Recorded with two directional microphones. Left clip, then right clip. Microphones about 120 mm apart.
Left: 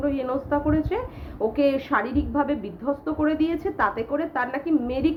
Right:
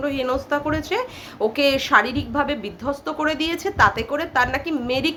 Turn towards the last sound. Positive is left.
turn(degrees=-25)  # may be behind; listen again after turning